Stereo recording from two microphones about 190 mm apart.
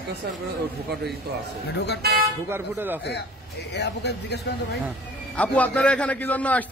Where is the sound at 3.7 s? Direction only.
60° left (ahead or behind).